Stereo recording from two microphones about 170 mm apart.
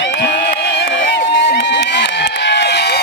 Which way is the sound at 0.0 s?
90° left.